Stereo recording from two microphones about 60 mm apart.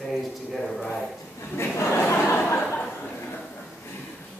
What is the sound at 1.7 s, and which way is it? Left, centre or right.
Speech, left.